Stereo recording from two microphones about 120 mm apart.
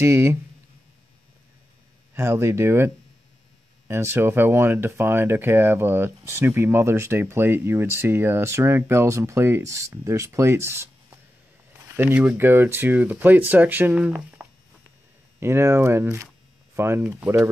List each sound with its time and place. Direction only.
0.0 s speech: 20° right (ahead or behind)
2.1 s speech: 20° right (ahead or behind)
15.4 s speech: 20° right (ahead or behind)